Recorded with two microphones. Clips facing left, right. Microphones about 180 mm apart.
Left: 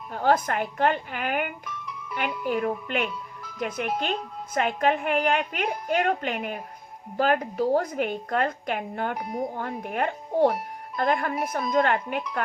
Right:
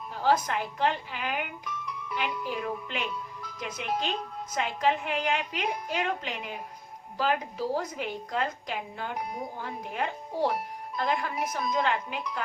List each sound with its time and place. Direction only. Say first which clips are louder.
0.1 s a woman's voice: left 3 dB; 55° left (ahead or behind)
2.5 s a woman's voice: left 7 dB; 55° left (ahead or behind)